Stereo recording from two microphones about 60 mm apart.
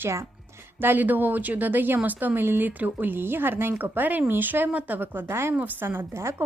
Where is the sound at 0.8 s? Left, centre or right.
Right.